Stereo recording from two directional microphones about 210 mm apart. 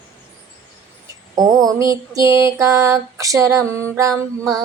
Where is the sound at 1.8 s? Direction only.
15° right (ahead or behind).